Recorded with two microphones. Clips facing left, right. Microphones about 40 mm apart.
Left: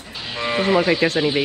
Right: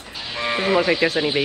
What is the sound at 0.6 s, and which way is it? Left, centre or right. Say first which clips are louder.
Speech: left 2 dB; left.